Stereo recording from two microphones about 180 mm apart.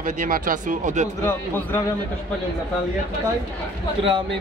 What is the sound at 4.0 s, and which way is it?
Speech, 30° right (ahead or behind).